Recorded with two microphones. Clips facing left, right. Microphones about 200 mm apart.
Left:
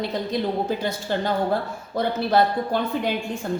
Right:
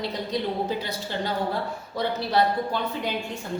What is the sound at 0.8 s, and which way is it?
A woman's voice, 50° left (ahead or behind).